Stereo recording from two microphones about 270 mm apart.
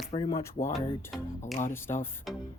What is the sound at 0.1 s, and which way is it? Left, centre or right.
Speech, centre.